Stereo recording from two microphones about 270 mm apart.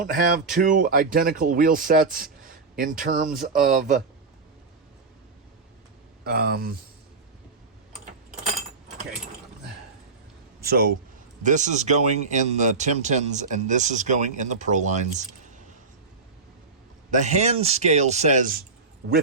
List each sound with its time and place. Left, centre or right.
0.0 s speech: right
6.2 s speech: right
10.6 s a man's voice: right
17.1 s speech: right